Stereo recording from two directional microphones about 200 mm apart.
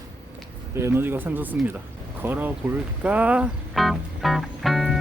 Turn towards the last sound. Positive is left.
turn(degrees=0)  # may be behind; listen again after turning